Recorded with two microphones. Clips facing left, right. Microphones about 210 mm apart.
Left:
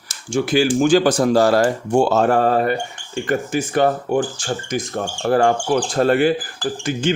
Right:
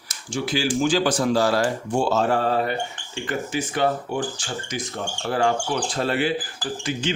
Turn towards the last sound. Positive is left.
turn(degrees=50)  # may be behind; listen again after turning